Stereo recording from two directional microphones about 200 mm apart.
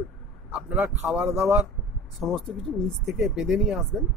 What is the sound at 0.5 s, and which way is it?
A man's voice, 5° right (ahead or behind).